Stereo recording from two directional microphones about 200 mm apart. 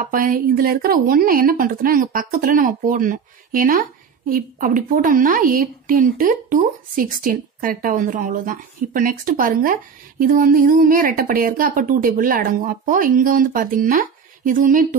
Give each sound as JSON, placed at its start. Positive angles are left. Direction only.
{"t": 0.0, "sound": "a woman's voice", "side_deg": -45}